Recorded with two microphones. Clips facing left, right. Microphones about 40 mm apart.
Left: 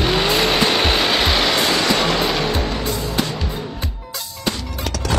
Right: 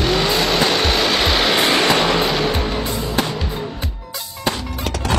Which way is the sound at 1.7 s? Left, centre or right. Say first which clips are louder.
Right 2 dB; right.